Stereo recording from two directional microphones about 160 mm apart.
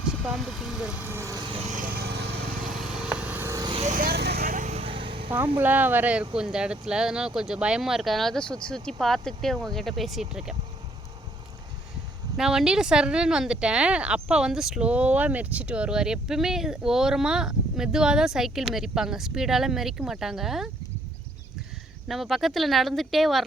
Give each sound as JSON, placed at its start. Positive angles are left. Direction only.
{"t": 0.0, "sound": "speech", "side_deg": 0}
{"t": 1.7, "sound": "vehicle", "side_deg": -65}
{"t": 2.9, "sound": "vehicle", "side_deg": -5}
{"t": 3.6, "sound": "vehicle", "side_deg": -30}
{"t": 3.8, "sound": "vehicle", "side_deg": -60}
{"t": 5.5, "sound": "speech", "side_deg": -10}
{"t": 12.4, "sound": "speech", "side_deg": -5}
{"t": 22.0, "sound": "speech", "side_deg": 0}